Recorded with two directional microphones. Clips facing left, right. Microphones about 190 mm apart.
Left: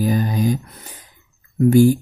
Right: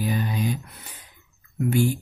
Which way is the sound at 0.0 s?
40° left (ahead or behind).